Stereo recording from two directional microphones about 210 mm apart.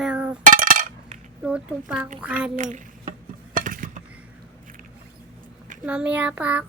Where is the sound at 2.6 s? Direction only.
35° right (ahead or behind).